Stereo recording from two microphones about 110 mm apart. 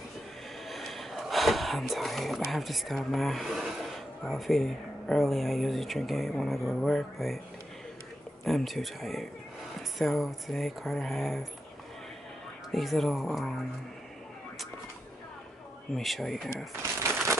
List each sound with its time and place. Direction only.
0.7 s speech: centre (ahead or behind)
8.5 s speech: centre (ahead or behind)
12.7 s speech: centre (ahead or behind)
16.0 s speech: centre (ahead or behind)
17.0 s a sound: 25° right (ahead or behind)